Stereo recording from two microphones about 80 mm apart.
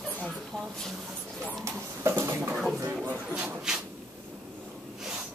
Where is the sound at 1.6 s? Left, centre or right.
Right.